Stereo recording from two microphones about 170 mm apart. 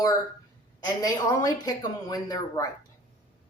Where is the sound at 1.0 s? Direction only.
20° left (ahead or behind).